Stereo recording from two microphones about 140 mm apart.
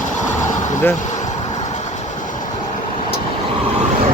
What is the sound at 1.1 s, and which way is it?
Vehicle, 60° left (ahead or behind).